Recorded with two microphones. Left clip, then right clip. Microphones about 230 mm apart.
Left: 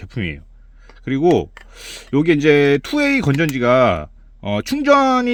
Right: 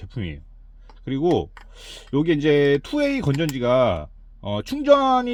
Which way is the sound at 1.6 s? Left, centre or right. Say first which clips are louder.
Left 6 dB; left.